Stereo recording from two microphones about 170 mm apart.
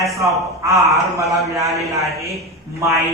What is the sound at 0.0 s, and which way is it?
A man's voice, 20° right (ahead or behind).